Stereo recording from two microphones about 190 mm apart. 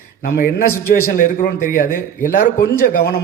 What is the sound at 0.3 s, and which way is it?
A man's voice, 50° left (ahead or behind).